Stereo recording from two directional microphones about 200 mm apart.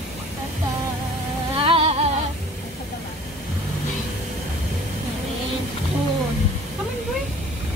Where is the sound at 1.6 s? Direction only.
30° right (ahead or behind).